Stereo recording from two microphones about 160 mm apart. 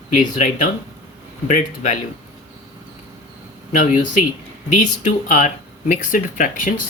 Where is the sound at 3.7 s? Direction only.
50° left (ahead or behind).